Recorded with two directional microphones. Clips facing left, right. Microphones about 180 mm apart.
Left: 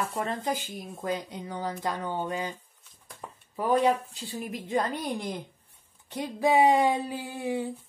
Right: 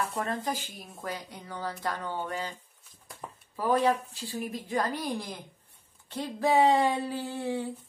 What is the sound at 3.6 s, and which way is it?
A woman's voice, 20° left (ahead or behind).